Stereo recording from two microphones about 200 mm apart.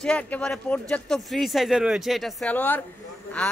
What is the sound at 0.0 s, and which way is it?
Speech, 5° left (ahead or behind).